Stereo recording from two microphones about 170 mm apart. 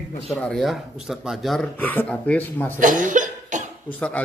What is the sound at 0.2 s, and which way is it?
Speech, centre (ahead or behind).